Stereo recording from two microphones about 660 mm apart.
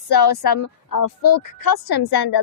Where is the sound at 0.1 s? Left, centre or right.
Left.